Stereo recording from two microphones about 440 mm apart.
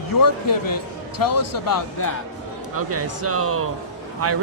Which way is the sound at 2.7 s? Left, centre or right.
Right.